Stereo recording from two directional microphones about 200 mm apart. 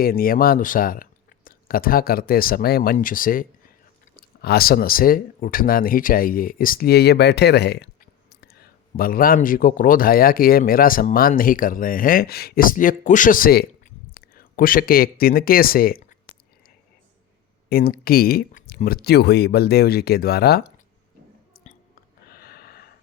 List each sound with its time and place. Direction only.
0.0 s speech: 45° left (ahead or behind)
17.7 s speech: 50° left (ahead or behind)
22.3 s a sound: 50° left (ahead or behind)